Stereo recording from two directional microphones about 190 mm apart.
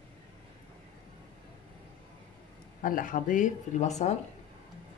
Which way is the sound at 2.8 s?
45° left (ahead or behind).